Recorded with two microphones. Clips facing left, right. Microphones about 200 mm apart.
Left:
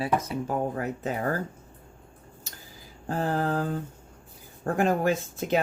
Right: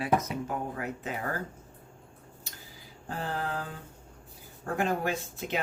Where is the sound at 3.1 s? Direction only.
45° left (ahead or behind).